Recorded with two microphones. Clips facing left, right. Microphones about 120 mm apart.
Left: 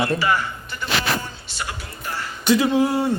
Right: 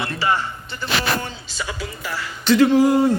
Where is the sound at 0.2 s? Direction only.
25° right (ahead or behind).